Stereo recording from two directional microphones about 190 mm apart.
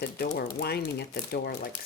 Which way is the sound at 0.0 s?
55° left (ahead or behind).